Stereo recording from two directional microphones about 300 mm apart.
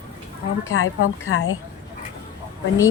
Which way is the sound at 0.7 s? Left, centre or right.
Left.